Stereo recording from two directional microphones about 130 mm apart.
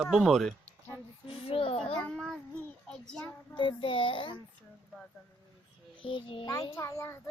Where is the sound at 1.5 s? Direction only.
45° left (ahead or behind).